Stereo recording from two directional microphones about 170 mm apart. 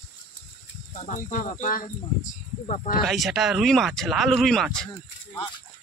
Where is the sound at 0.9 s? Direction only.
45° left (ahead or behind).